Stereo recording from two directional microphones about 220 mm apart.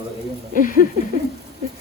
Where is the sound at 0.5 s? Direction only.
40° left (ahead or behind).